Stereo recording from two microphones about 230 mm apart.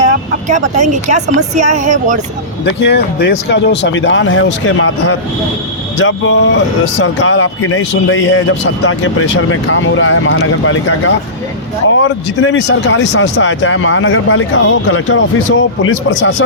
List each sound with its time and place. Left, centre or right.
0.4 s speech: right
2.6 s speech: left